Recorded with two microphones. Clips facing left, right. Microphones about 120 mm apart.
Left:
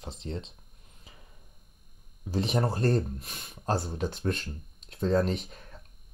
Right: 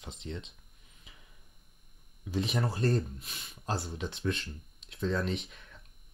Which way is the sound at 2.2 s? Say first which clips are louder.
Left 4 dB; 35° left (ahead or behind).